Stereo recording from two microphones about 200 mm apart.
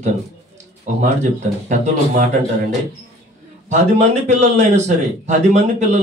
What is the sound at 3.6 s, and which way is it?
A man's voice, 35° right (ahead or behind).